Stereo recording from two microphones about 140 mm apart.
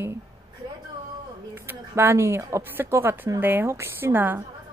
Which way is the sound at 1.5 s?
15° right (ahead or behind).